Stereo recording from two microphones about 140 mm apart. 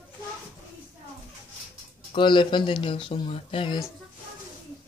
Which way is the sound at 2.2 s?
35° left (ahead or behind).